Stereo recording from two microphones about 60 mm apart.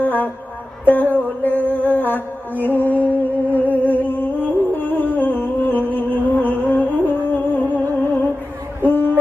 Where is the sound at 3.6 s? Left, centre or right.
Left.